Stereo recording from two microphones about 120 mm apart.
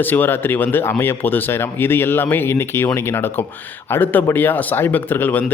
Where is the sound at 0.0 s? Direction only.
15° left (ahead or behind).